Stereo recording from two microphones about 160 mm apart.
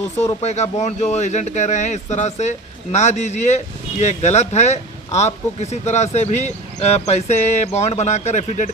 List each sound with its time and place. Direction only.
0.4 s speech: 45° left (ahead or behind)